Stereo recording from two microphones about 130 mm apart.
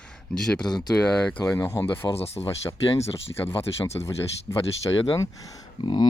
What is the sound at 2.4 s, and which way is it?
Speech, 20° left (ahead or behind).